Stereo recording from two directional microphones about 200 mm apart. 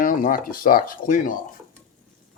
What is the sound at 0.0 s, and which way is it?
Speech, 45° left (ahead or behind).